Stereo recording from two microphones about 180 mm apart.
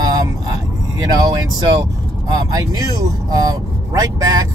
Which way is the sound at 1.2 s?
20° right (ahead or behind).